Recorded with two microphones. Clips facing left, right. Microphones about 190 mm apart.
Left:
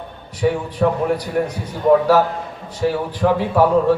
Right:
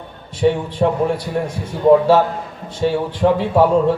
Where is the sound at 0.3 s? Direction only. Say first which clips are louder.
Right 2 dB; 25° right (ahead or behind).